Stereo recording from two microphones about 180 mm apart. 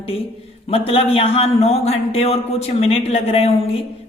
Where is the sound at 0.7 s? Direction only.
30° left (ahead or behind).